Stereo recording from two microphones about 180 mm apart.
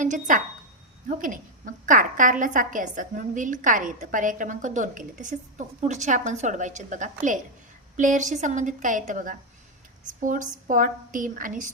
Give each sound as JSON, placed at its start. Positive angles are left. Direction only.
{"t": 0.0, "sound": "a woman's voice", "side_deg": -45}